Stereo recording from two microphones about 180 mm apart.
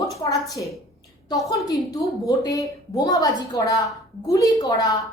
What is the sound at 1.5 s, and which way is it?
A woman's voice, 20° left (ahead or behind).